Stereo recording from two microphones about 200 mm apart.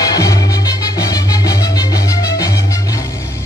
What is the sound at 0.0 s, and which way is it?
Music, 20° left (ahead or behind).